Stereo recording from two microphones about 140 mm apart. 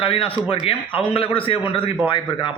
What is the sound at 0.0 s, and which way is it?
Speech, 40° left (ahead or behind).